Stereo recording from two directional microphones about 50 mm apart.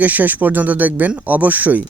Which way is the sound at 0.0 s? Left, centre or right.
Right.